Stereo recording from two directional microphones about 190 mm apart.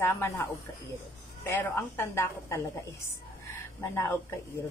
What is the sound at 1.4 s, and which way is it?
Speech, 10° left (ahead or behind).